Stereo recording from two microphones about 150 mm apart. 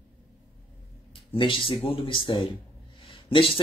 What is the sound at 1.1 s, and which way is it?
Speech, 35° left (ahead or behind).